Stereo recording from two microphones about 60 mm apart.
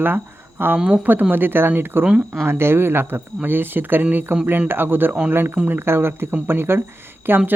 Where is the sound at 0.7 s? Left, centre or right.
Right.